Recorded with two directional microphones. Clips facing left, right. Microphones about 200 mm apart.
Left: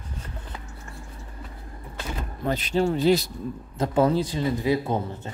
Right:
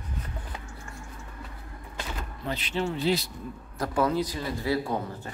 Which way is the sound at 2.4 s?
45° left (ahead or behind).